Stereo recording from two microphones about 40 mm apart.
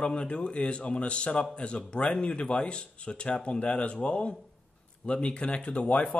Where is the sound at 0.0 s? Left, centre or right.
Left.